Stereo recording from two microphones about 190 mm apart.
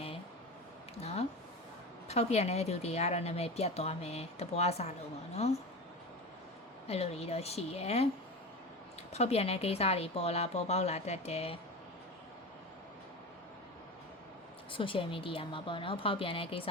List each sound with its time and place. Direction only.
2.0 s speech: 35° left (ahead or behind)
6.8 s speech: 30° left (ahead or behind)
9.1 s speech: 35° left (ahead or behind)
14.7 s a woman's voice: 25° left (ahead or behind)